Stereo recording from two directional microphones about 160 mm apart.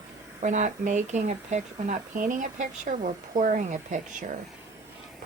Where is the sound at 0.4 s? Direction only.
50° right (ahead or behind).